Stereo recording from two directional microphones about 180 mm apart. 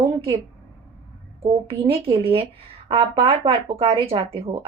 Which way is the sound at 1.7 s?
30° right (ahead or behind).